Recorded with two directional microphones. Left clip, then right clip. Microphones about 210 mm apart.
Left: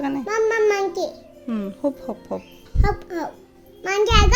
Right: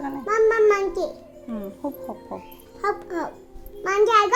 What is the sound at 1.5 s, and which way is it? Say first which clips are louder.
Speech: left 6 dB; 45° left (ahead or behind).